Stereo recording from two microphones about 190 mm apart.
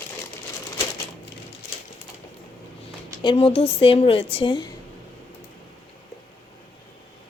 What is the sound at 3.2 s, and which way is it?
A woman's voice, 25° left (ahead or behind).